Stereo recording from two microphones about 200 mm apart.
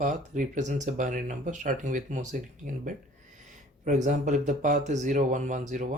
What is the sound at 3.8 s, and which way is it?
Speech, 40° right (ahead or behind).